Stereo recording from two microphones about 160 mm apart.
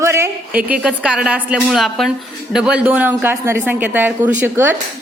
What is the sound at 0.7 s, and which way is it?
A woman's voice, 5° right (ahead or behind).